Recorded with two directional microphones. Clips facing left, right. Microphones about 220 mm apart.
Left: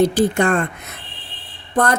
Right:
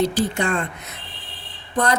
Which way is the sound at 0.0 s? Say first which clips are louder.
Left 5 dB; 55° left (ahead or behind).